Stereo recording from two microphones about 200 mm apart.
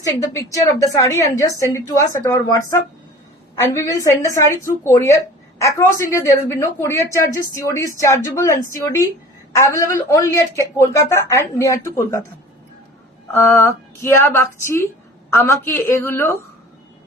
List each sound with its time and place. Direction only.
0.0 s speech: 15° left (ahead or behind)
9.5 s speech: 15° left (ahead or behind)
13.3 s speech: 15° left (ahead or behind)